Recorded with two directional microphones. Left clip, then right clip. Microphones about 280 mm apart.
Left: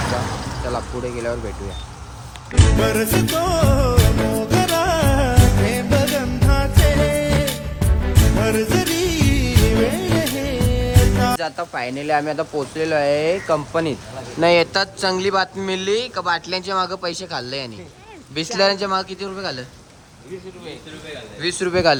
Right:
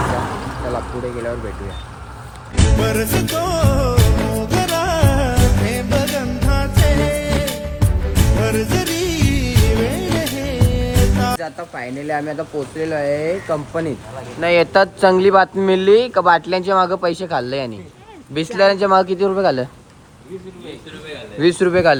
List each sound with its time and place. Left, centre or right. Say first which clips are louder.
0.7 s speech: right 1 dB; centre
2.6 s music: even; centre
11.4 s speech: left 3 dB; centre
14.4 s speech: right 2 dB; centre
21.3 s speech: right 6 dB; centre